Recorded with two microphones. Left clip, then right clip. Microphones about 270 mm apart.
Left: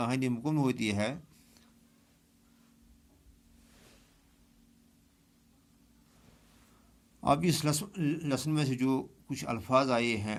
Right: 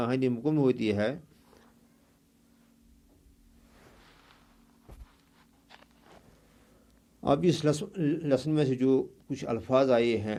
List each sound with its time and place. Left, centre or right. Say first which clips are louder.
0.0 s a man's voice: right 4 dB; left
7.2 s a man's voice: right 2 dB; left